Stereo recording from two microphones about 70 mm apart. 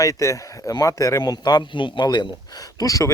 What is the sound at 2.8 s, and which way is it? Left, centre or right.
Speech, left.